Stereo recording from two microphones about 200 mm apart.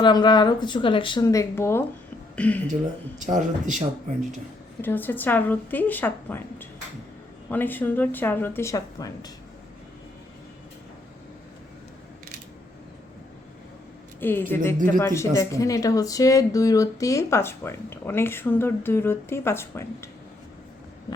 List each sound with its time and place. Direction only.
0.0 s speech: 20° left (ahead or behind)
3.2 s speech: 40° right (ahead or behind)
4.8 s speech: 10° left (ahead or behind)
14.2 s speech: 10° left (ahead or behind)